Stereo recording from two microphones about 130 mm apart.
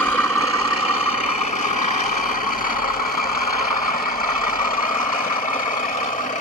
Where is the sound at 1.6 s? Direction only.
70° left (ahead or behind); by 5.6 s 90° left.